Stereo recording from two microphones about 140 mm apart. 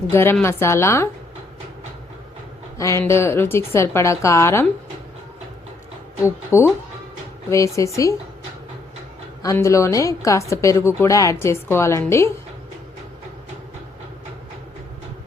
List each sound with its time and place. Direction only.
0.1 s a woman's voice: 15° left (ahead or behind)
2.7 s a woman's voice: 20° left (ahead or behind)
6.2 s a woman's voice: 20° left (ahead or behind)
9.4 s a woman's voice: 20° left (ahead or behind)